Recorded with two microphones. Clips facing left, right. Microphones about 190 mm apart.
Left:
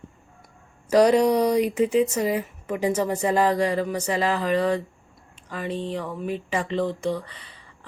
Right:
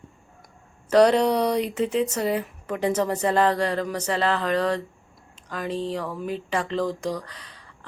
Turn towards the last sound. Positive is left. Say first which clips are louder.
# right 1 dB
turn(degrees=5)  # may be behind; listen again after turning